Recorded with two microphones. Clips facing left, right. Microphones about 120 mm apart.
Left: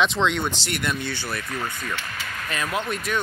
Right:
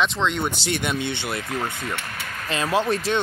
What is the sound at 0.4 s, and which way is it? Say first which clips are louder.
Speech: right 2 dB; 15° right (ahead or behind).